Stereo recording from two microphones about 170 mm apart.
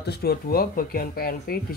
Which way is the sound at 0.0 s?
70° left (ahead or behind).